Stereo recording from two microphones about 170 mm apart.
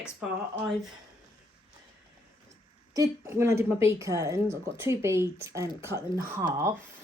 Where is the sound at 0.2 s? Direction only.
5° right (ahead or behind).